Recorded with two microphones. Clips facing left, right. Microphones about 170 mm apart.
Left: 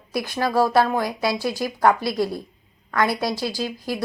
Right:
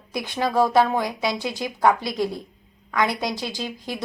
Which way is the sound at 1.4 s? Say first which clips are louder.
Left 1 dB; 20° right (ahead or behind).